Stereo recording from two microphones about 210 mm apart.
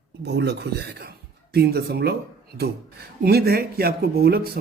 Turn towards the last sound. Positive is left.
turn(degrees=-50)  # may be behind; listen again after turning